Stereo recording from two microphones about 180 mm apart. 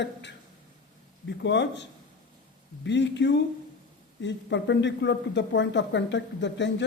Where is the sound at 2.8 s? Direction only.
80° left.